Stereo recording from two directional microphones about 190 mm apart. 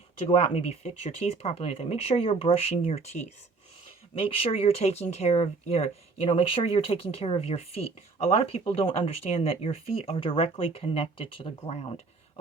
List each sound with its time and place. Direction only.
0.3 s speech: 35° left (ahead or behind)